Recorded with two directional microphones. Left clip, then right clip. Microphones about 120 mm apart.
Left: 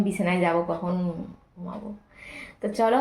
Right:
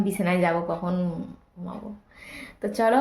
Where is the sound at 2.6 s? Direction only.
15° right (ahead or behind).